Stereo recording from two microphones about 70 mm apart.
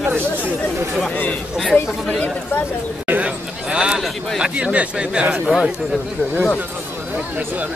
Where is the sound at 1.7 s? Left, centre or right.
Centre.